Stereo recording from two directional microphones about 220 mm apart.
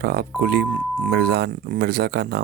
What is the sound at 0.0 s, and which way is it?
Speech, 45° right (ahead or behind).